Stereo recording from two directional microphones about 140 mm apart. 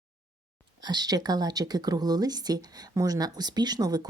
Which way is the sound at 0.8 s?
30° right (ahead or behind).